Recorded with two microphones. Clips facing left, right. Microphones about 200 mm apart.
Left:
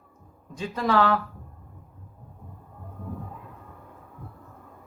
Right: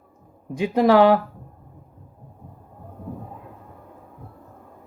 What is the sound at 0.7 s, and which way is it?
Speech, 65° right (ahead or behind).